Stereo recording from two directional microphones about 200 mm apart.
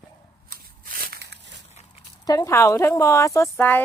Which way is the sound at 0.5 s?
45° right (ahead or behind).